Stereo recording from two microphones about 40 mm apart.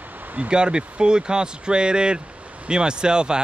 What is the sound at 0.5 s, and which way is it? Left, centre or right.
Speech, right.